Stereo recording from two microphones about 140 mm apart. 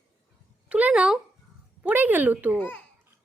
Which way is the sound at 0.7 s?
10° right (ahead or behind).